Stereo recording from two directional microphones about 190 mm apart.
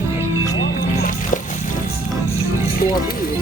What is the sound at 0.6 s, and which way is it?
Music, 45° left (ahead or behind).